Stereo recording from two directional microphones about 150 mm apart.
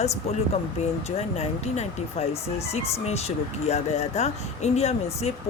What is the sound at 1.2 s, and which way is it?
Speech, 45° left (ahead or behind).